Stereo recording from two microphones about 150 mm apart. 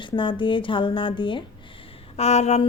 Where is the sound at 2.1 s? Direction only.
45° left (ahead or behind).